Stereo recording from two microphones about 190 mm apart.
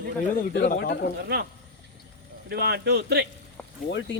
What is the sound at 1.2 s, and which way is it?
Speech, 60° right (ahead or behind).